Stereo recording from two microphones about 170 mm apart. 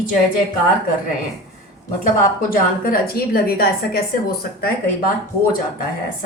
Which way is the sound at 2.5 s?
60° left (ahead or behind).